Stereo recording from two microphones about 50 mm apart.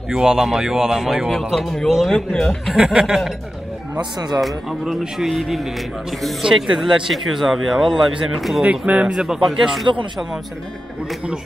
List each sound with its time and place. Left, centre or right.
0.1 s speech: centre
1.5 s speech: centre
2.7 s speech: centre
4.4 s speech: centre
6.4 s speech: centre
6.8 s speech: centre
8.6 s speech: right
9.2 s speech: centre